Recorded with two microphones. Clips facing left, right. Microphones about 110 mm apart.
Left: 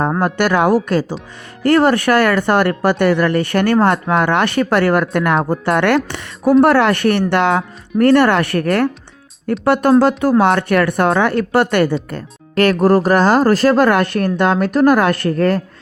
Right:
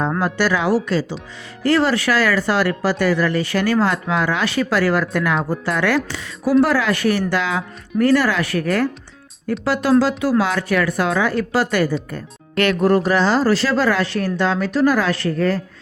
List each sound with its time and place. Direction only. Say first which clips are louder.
0.2 s speech: left 4 dB; 55° left (ahead or behind)
12.5 s speech: left 4 dB; 40° left (ahead or behind); by 15.6 s 60° left (ahead or behind)